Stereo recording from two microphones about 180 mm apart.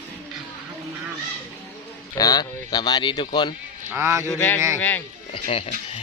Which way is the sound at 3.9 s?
15° right (ahead or behind).